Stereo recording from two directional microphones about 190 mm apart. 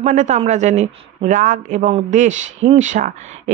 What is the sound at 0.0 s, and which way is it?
Speech, 40° right (ahead or behind).